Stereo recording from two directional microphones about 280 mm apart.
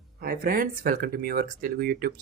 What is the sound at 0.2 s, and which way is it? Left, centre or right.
Speech, right.